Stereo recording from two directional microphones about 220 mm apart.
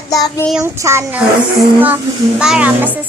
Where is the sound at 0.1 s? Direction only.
15° left (ahead or behind).